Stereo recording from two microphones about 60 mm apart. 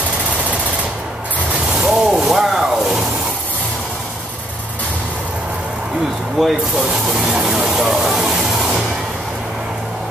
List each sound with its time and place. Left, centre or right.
1.8 s vehicle: centre
6.4 s speech: centre
7.2 s vehicle: centre